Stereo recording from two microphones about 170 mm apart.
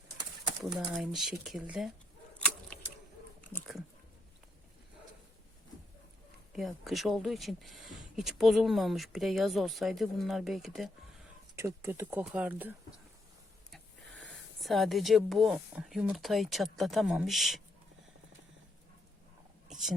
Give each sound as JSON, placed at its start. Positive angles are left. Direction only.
{"t": 0.9, "sound": "speech", "side_deg": 0}
{"t": 6.5, "sound": "speech", "side_deg": 0}
{"t": 11.5, "sound": "speech", "side_deg": -15}
{"t": 13.7, "sound": "speech", "side_deg": 0}
{"t": 19.6, "sound": "a sound", "side_deg": 0}